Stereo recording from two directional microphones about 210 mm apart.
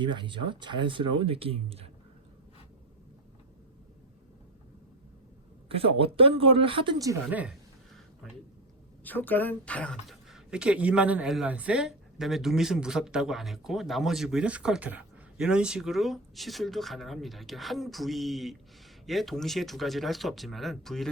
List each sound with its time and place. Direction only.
0.0 s speech: 20° right (ahead or behind)
5.6 s speech: 25° right (ahead or behind); by 7.5 s 5° right (ahead or behind)
9.0 s speech: 10° left (ahead or behind)